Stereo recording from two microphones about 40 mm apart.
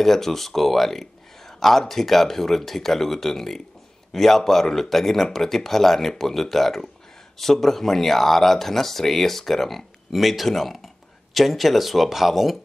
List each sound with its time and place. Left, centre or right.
0.0 s speech: centre